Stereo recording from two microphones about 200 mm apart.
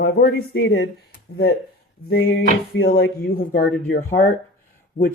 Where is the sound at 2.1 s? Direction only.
55° left (ahead or behind).